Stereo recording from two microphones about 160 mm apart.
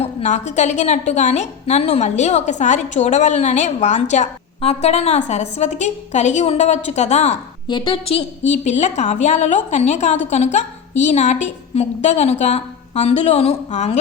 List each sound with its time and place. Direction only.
0.0 s a woman's voice: 45° left (ahead or behind)
7.7 s a woman's voice: 30° left (ahead or behind); by 14.0 s 45° left (ahead or behind)